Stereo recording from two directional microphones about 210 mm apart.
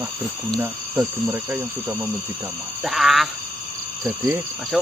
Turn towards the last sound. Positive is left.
turn(degrees=0)  # may be behind; listen again after turning